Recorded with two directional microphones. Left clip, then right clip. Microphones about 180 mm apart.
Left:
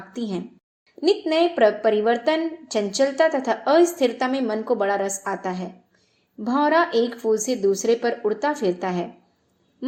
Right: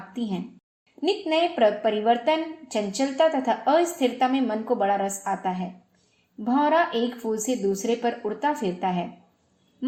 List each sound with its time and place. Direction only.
0.1 s a woman's voice: 35° left (ahead or behind)